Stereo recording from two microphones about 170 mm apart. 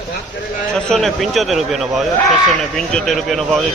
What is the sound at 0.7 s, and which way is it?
A man's voice, centre (ahead or behind).